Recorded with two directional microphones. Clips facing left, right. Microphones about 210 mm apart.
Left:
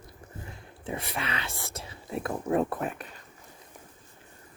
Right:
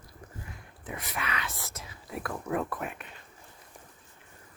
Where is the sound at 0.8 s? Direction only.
30° left (ahead or behind).